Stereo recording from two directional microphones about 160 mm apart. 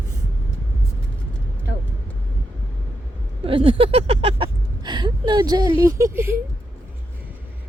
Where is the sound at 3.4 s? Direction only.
35° right (ahead or behind).